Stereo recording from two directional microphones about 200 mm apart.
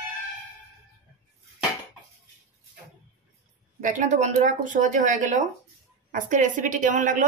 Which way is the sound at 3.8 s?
40° right (ahead or behind).